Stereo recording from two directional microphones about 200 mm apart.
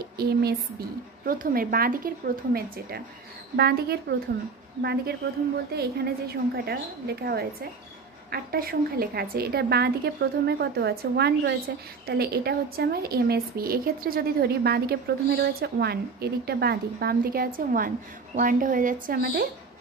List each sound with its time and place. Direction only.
0.2 s a woman's voice: 50° right (ahead or behind)